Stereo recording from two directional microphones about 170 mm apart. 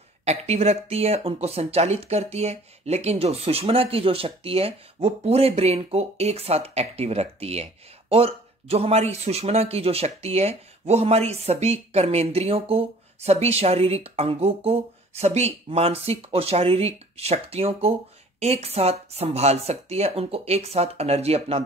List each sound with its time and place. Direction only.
0.2 s speech: 40° right (ahead or behind)